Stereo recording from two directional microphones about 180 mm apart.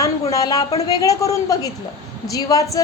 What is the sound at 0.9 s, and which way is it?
A woman's voice, 20° left (ahead or behind).